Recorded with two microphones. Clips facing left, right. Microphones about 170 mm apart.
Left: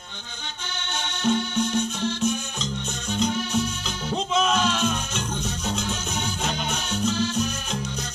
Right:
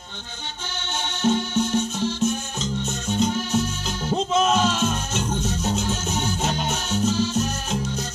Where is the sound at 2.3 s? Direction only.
45° right (ahead or behind).